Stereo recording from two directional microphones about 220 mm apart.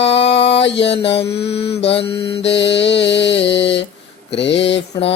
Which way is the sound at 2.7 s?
55° left (ahead or behind).